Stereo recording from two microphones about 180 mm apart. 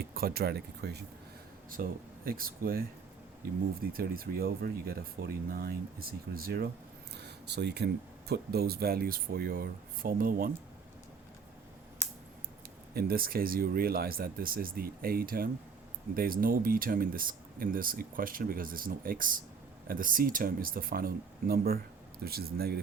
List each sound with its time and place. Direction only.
0.0 s speech: 55° right (ahead or behind)
1.7 s speech: 55° right (ahead or behind)
3.9 s speech: 55° right (ahead or behind)
7.2 s a sound: 65° right (ahead or behind)
8.3 s speech: 60° right (ahead or behind)
12.9 s speech: 60° right (ahead or behind)